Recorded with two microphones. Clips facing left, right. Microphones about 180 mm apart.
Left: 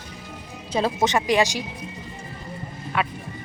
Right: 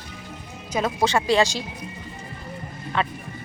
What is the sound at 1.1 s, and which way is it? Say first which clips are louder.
Speech: right 1 dB; 15° left (ahead or behind).